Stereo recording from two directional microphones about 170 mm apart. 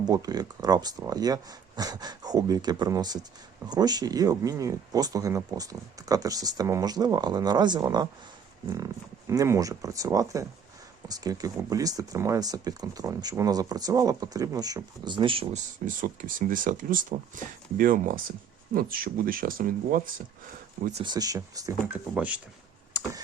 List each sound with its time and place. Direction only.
0.0 s speech: 25° right (ahead or behind)
9.3 s speech: 20° right (ahead or behind)
15.5 s speech: 50° right (ahead or behind)
21.0 s speech: 25° right (ahead or behind); by 22.4 s 10° right (ahead or behind)